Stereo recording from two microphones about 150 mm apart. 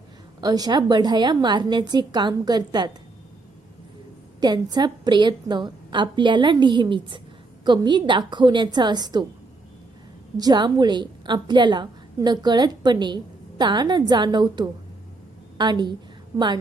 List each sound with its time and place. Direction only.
0.4 s a woman's voice: 25° right (ahead or behind)
4.4 s a woman's voice: 30° right (ahead or behind)
10.3 s a woman's voice: 25° right (ahead or behind)